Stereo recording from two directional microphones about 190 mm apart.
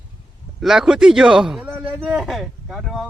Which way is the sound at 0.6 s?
Centre (ahead or behind).